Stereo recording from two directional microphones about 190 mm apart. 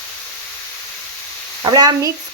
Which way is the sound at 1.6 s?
20° right (ahead or behind).